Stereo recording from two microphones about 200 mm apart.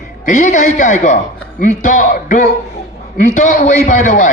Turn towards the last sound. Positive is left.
turn(degrees=40)  # may be behind; listen again after turning